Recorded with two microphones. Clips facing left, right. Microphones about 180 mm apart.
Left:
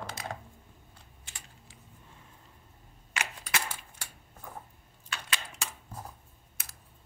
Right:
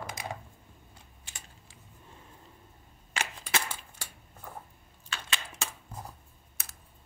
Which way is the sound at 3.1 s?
30° right (ahead or behind).